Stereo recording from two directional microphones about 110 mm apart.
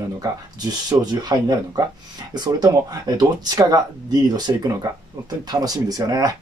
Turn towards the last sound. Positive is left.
turn(degrees=-35)  # may be behind; listen again after turning